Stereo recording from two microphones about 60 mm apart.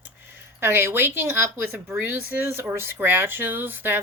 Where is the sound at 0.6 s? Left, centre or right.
Right.